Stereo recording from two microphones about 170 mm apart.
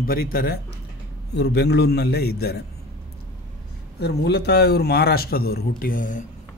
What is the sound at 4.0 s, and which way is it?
Speech, 75° left (ahead or behind).